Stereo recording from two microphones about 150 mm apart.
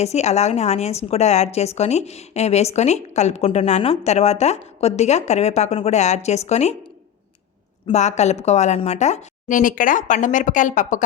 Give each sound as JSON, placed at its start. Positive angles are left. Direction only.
{"t": 0.0, "sound": "a woman's voice", "side_deg": 45}
{"t": 7.9, "sound": "a woman's voice", "side_deg": 50}